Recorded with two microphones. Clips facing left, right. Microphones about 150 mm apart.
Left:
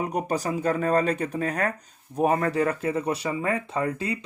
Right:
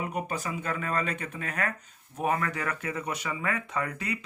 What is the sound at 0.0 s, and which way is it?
Speech, 40° left (ahead or behind).